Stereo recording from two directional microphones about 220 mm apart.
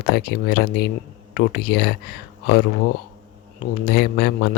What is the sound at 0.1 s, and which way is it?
Speech, 45° left (ahead or behind).